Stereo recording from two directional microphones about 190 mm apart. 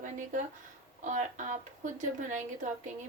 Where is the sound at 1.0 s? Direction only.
40° right (ahead or behind).